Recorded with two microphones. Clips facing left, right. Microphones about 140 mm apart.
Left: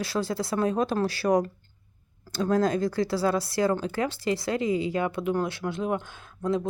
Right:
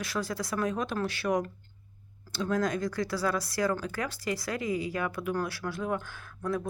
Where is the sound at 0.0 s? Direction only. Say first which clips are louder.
Left 5 dB; 30° left (ahead or behind); by 2.6 s 45° left (ahead or behind).